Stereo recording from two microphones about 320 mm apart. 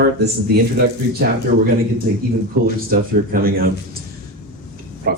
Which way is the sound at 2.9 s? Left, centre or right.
Right.